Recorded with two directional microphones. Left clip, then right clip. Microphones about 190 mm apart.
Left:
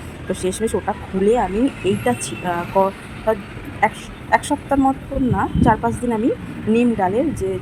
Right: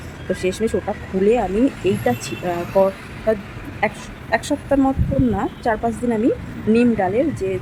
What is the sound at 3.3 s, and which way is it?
Speech, 15° right (ahead or behind).